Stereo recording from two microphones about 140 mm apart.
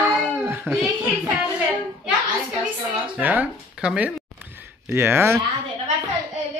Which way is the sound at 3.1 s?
10° right (ahead or behind).